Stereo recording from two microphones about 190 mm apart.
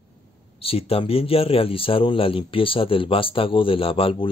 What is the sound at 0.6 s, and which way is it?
A man's voice, 30° left (ahead or behind).